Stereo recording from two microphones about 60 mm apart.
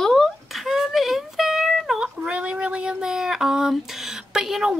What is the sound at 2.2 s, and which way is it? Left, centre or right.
Child singing, centre.